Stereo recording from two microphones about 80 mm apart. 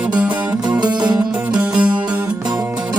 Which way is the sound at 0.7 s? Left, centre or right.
Right.